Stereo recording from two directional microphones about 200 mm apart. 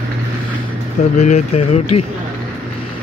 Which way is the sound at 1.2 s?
35° left (ahead or behind).